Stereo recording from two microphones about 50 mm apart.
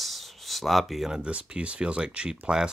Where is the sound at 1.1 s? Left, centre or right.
Right.